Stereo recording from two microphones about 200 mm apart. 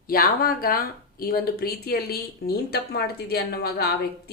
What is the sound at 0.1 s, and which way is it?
Speech, 45° left (ahead or behind).